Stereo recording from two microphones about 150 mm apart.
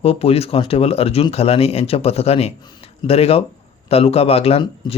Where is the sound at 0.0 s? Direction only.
40° left (ahead or behind).